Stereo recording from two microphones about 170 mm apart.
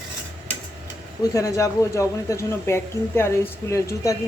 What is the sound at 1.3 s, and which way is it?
Speech, 20° left (ahead or behind).